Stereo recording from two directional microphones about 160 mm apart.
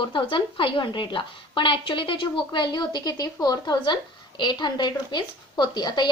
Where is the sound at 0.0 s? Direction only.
30° left (ahead or behind).